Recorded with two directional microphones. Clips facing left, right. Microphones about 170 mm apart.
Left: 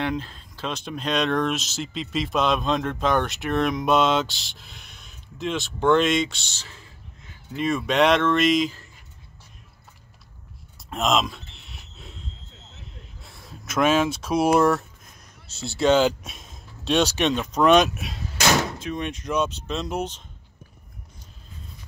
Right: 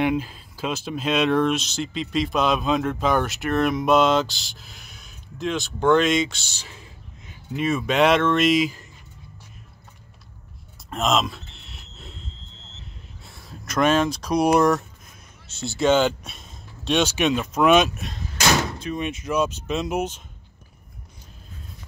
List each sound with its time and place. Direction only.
0.0 s speech: 10° right (ahead or behind)
6.5 s speech: 15° right (ahead or behind)
7.5 s speech: 5° right (ahead or behind)
10.9 s a sound: centre (ahead or behind)
13.2 s speech: centre (ahead or behind)
17.9 s speech: 5° left (ahead or behind)